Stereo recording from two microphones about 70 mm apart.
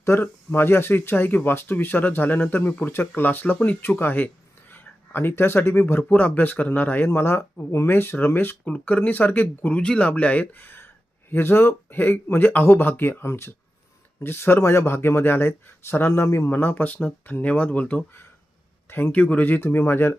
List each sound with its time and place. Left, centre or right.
0.0 s speech: left
8.6 s speech: left
16.5 s speech: left